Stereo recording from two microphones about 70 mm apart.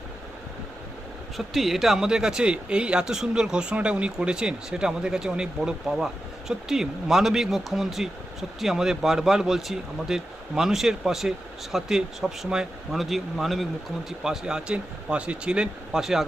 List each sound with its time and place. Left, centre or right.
1.4 s speech: centre